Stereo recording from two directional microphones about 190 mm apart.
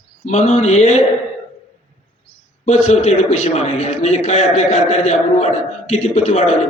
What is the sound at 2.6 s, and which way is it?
A man's voice, 35° left (ahead or behind).